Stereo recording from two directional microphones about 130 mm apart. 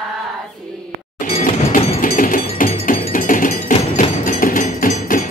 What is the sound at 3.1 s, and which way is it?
Cowbell, 90° left.